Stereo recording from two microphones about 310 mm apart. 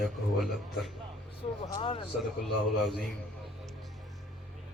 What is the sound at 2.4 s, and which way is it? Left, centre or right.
Speech, centre.